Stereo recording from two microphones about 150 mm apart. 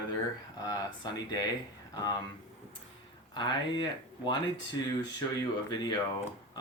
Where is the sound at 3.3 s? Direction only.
30° left (ahead or behind).